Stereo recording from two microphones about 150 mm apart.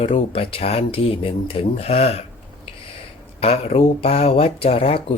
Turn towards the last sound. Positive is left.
turn(degrees=40)  # may be behind; listen again after turning